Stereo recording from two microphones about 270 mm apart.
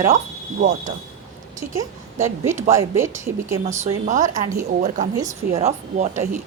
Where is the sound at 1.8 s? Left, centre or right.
Centre.